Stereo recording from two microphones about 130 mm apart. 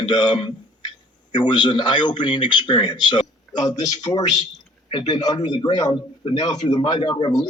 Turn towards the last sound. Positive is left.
turn(degrees=40)  # may be behind; listen again after turning